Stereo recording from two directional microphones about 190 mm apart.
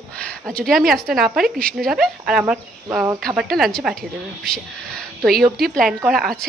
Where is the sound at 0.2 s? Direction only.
5° left (ahead or behind).